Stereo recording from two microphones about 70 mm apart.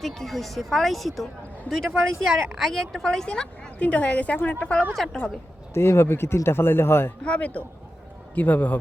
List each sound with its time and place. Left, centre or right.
0.0 s a woman's voice: centre
5.7 s a man's voice: left
7.3 s a man's voice: centre